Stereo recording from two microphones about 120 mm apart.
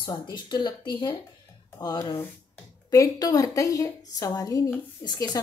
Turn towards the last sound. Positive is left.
turn(degrees=35)  # may be behind; listen again after turning